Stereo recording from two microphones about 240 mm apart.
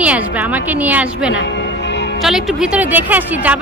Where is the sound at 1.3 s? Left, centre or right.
Left.